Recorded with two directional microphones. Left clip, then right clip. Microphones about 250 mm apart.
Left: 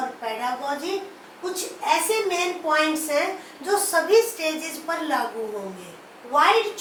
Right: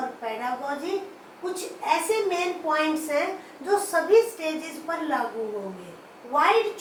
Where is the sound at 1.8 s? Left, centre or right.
Centre.